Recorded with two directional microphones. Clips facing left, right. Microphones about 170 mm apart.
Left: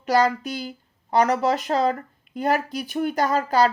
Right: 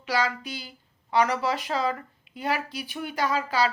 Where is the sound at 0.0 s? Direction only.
45° left (ahead or behind).